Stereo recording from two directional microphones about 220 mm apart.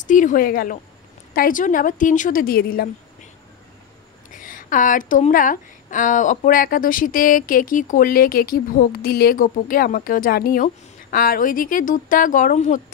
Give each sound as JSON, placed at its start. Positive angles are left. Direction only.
{"t": 0.0, "sound": "a woman's voice", "side_deg": 35}
{"t": 4.3, "sound": "a woman's voice", "side_deg": 35}